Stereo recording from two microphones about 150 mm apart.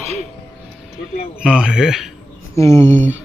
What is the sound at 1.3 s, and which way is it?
Speech, 5° right (ahead or behind).